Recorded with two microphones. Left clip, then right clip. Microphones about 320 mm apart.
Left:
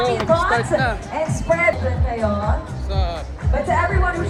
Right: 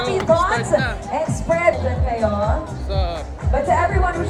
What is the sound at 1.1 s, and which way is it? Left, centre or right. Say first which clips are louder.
Music: even; right.